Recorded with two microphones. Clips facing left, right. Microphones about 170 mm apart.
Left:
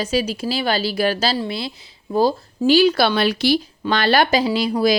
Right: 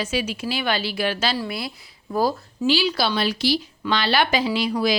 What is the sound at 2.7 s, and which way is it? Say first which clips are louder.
A woman's voice: left 7 dB; 50° left (ahead or behind).